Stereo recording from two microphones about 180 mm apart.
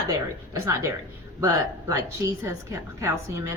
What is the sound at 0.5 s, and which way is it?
Speech, 15° right (ahead or behind).